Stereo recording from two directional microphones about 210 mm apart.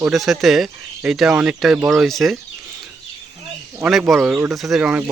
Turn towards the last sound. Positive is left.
turn(degrees=-5)  # may be behind; listen again after turning